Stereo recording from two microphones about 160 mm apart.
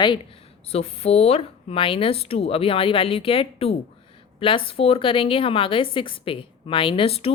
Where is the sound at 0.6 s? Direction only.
40° left (ahead or behind).